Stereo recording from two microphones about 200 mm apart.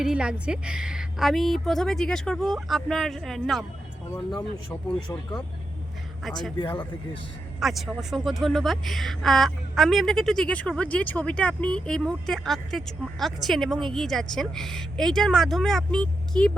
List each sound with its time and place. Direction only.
0.0 s speech: 5° right (ahead or behind)
6.6 s speech: 20° left (ahead or behind)
7.6 s speech: centre (ahead or behind)